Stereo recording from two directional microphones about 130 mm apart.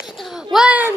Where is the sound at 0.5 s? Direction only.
10° right (ahead or behind).